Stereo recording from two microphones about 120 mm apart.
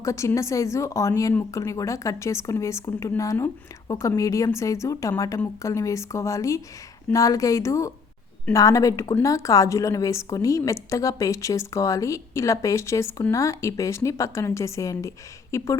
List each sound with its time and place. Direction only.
0.0 s a woman's voice: 25° left (ahead or behind)